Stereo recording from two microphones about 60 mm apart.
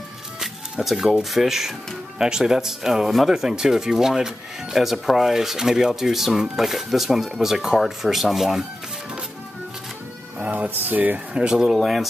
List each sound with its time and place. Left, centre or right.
0.4 s a sound: centre
1.3 s speech: centre
10.4 s music: right
10.7 s speech: right
11.3 s speech: centre
11.6 s speech: centre